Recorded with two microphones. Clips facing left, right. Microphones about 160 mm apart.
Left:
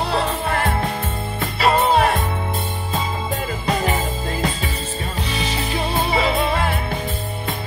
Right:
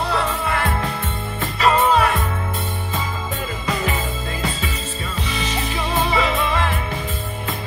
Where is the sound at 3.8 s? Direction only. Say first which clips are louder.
Left 2 dB; 35° left (ahead or behind).